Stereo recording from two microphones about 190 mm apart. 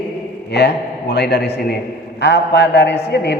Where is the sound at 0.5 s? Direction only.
60° left (ahead or behind).